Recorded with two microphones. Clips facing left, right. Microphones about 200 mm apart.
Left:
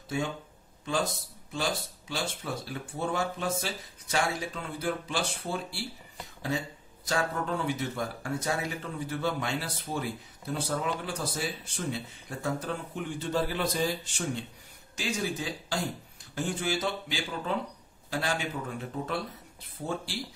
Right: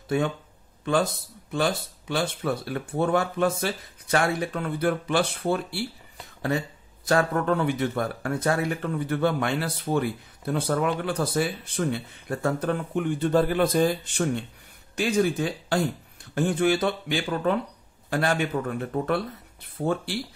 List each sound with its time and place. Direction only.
0.1 s speech: 60° right (ahead or behind)
1.5 s speech: 60° right (ahead or behind)
7.1 s speech: 60° right (ahead or behind)